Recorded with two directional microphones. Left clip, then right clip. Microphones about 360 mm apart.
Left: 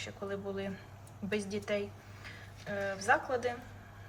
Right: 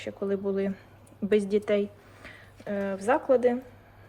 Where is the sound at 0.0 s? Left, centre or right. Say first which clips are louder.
Right 9 dB; centre.